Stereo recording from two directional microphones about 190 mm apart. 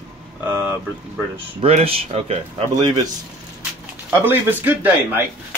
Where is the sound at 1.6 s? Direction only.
30° right (ahead or behind).